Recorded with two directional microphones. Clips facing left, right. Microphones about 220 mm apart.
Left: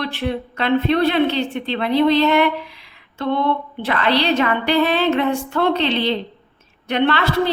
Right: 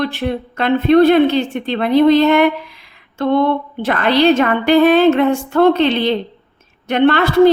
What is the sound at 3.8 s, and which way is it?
A woman's voice, 50° right (ahead or behind).